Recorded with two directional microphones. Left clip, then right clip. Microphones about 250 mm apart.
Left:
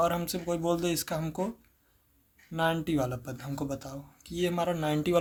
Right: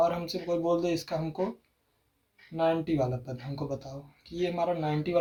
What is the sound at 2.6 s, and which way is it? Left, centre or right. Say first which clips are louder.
Speech: right 2 dB; left.